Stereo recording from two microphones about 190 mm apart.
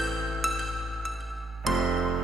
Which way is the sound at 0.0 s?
Centre (ahead or behind).